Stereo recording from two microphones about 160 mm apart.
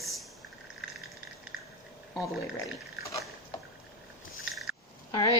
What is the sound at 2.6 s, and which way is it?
Dog, 20° left (ahead or behind).